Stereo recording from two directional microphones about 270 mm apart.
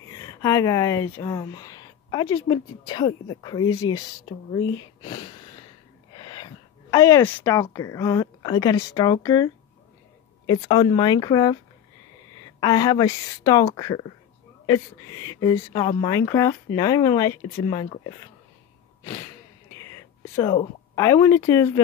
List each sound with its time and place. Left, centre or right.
0.1 s speech: centre
5.0 s a sound: centre
7.7 s speech: centre
12.5 s speech: centre
19.8 s speech: centre